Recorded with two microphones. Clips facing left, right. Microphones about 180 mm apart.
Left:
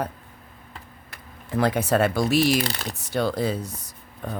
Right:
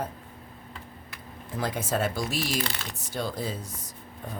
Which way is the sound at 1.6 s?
70° left (ahead or behind).